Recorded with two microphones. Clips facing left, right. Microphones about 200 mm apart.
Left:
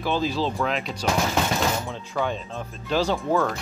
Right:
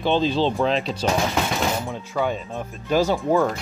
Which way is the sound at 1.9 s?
15° right (ahead or behind).